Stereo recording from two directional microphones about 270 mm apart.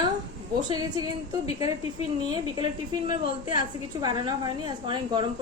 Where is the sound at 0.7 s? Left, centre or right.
Centre.